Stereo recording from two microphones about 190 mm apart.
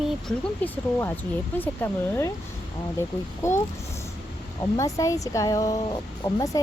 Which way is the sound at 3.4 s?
15° left (ahead or behind).